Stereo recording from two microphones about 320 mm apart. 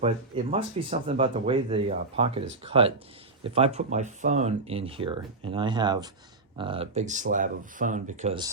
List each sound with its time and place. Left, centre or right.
0.0 s speech: centre